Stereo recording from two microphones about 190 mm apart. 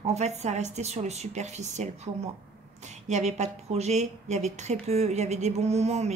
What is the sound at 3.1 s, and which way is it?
Speech, 35° right (ahead or behind).